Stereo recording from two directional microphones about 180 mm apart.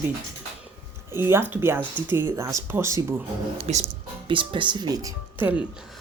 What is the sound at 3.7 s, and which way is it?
Speech, 35° right (ahead or behind).